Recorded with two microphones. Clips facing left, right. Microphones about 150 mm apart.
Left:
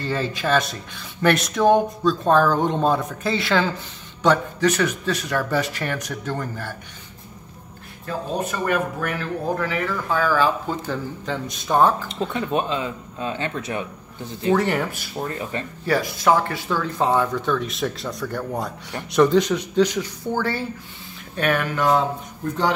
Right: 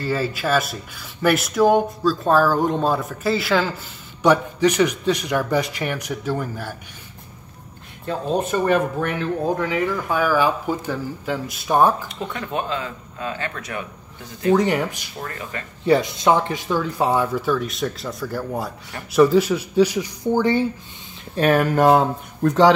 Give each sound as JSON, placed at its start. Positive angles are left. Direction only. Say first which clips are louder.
{"t": 0.0, "sound": "speech", "louder": "right 2 dB", "side_deg": -5}
{"t": 8.1, "sound": "speech", "louder": "right 4 dB", "side_deg": -25}
{"t": 12.3, "sound": "speech", "louder": "left 2 dB", "side_deg": 20}
{"t": 14.5, "sound": "speech", "louder": "right 2 dB", "side_deg": -15}
{"t": 15.1, "sound": "speech", "louder": "left 7 dB", "side_deg": 25}
{"t": 15.8, "sound": "speech", "louder": "right 4 dB", "side_deg": -20}
{"t": 21.4, "sound": "speech", "louder": "right 5 dB", "side_deg": -40}
{"t": 22.4, "sound": "speech", "louder": "right 9 dB", "side_deg": -85}